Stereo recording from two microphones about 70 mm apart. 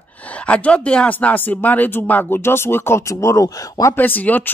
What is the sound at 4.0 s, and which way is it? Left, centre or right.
Speech, left.